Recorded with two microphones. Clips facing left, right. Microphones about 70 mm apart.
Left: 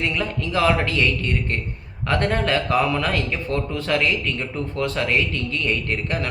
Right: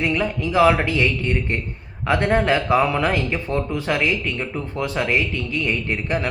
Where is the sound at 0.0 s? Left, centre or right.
Centre.